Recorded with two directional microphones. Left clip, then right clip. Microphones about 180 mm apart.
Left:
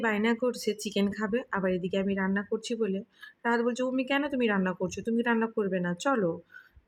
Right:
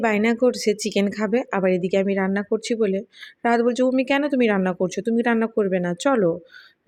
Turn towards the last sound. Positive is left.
turn(degrees=-20)  # may be behind; listen again after turning